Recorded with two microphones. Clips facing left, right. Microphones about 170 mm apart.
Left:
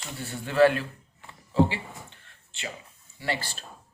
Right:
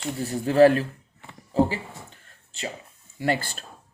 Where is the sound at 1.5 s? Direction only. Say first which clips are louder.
Right 1 dB; 40° right (ahead or behind).